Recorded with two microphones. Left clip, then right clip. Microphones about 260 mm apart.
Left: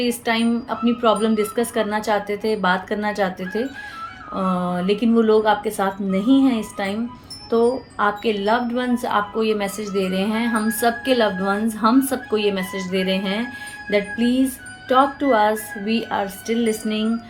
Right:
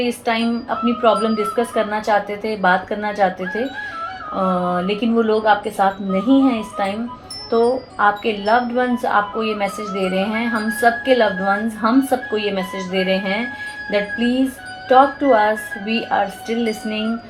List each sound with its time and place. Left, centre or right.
0.0 s a woman's voice: left
14.8 s a woman's voice: left